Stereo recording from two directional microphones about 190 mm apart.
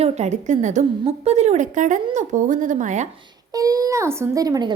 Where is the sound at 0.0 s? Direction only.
40° right (ahead or behind).